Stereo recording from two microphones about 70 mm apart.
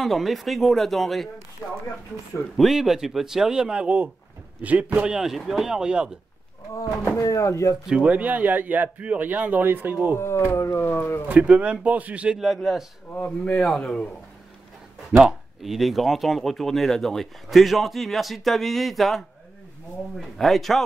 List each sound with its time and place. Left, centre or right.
0.0 s speech: centre
1.6 s speech: left
2.5 s speech: centre; by 5.0 s right
5.0 s speech: centre
7.2 s speech: left
7.9 s speech: centre
10.1 s speech: left
10.8 s speech: left
11.2 s speech: centre
12.4 s speech: centre
13.1 s speech: centre
13.7 s speech: centre
15.1 s speech: centre